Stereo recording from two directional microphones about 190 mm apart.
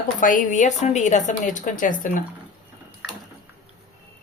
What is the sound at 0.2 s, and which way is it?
A woman's voice, 45° left (ahead or behind).